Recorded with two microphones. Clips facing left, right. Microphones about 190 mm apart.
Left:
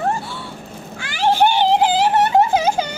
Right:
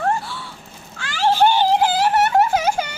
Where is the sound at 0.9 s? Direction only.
15° left (ahead or behind).